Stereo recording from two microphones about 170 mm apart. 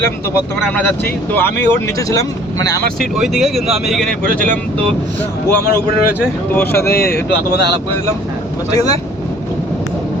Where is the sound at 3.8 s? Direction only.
Centre (ahead or behind).